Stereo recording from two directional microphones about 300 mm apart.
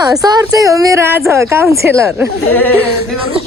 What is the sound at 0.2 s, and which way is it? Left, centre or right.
A woman's voice, centre.